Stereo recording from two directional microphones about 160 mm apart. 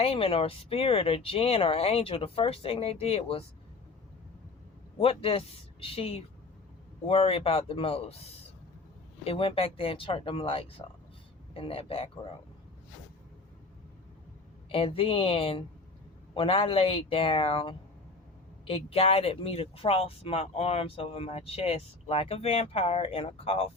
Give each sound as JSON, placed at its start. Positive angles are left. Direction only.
{"t": 0.0, "sound": "speech", "side_deg": 35}
{"t": 4.9, "sound": "speech", "side_deg": 35}
{"t": 14.7, "sound": "speech", "side_deg": 35}